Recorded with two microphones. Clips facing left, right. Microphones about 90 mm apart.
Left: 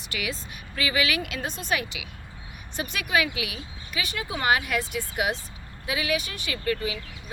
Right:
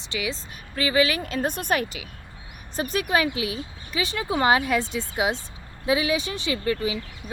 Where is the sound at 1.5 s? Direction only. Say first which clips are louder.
Right 5 dB; 55° right (ahead or behind).